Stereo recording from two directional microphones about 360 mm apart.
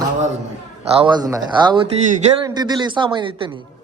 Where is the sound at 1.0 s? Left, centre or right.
Centre.